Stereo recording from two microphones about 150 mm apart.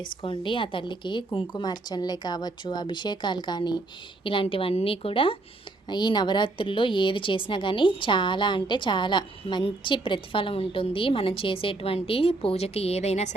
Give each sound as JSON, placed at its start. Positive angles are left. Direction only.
{"t": 0.2, "sound": "speech", "side_deg": 35}